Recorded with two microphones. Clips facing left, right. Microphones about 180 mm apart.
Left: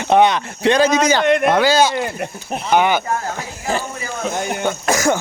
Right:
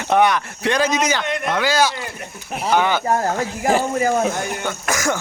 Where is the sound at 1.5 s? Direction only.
30° left (ahead or behind).